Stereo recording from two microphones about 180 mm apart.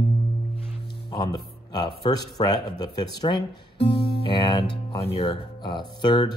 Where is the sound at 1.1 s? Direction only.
25° left (ahead or behind).